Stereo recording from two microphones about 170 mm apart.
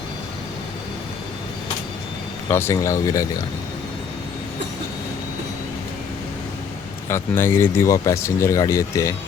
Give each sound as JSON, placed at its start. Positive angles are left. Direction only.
{"t": 2.5, "sound": "speech", "side_deg": 15}
{"t": 7.1, "sound": "speech", "side_deg": 15}